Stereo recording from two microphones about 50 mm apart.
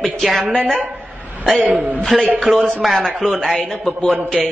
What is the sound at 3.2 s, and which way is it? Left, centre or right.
Speech, centre.